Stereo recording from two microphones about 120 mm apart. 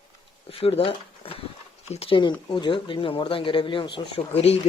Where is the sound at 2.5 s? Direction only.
40° left (ahead or behind).